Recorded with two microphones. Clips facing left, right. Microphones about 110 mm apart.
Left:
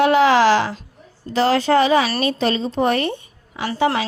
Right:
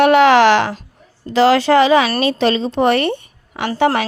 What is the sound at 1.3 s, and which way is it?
A woman's voice, 90° right.